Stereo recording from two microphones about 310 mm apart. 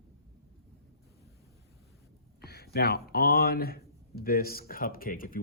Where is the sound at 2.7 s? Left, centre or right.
Left.